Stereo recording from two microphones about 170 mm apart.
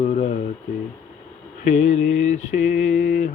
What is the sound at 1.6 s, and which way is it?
Mantra, 45° left (ahead or behind).